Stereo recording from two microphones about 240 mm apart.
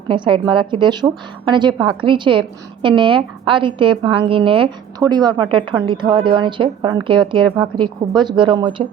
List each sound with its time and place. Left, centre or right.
0.1 s a woman's voice: right